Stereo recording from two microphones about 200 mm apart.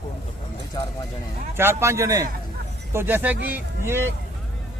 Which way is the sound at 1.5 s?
10° right (ahead or behind).